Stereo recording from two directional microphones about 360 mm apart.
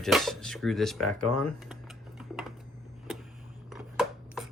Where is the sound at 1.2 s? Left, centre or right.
Left.